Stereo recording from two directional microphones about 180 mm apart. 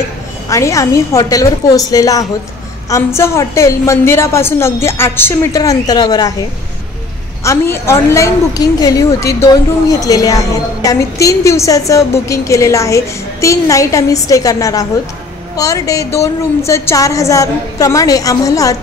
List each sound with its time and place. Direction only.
0.5 s a woman's voice: 15° left (ahead or behind)
7.4 s a woman's voice: 15° left (ahead or behind)